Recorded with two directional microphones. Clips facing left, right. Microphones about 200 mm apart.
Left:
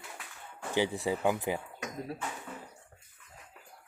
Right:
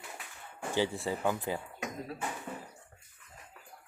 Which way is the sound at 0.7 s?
15° left (ahead or behind).